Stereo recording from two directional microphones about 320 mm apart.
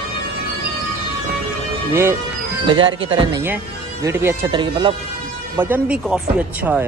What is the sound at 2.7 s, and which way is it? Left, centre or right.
Speech, centre.